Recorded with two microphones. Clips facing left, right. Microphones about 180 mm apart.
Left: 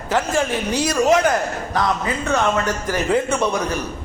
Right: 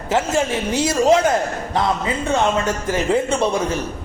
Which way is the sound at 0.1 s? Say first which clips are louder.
Right 1 dB; 25° right (ahead or behind).